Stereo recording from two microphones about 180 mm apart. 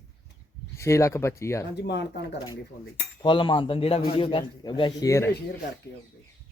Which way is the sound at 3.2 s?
30° left (ahead or behind).